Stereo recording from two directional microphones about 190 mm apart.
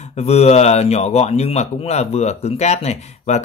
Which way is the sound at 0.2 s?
35° left (ahead or behind).